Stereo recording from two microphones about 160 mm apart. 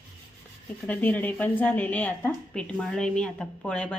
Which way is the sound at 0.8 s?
10° left (ahead or behind).